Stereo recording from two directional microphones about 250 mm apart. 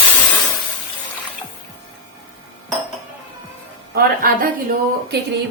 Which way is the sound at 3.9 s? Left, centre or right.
Right.